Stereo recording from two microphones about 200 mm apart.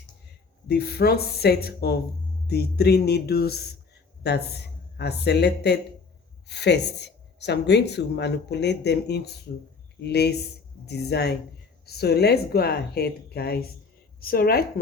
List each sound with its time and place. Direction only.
0.7 s a woman's voice: 55° left (ahead or behind)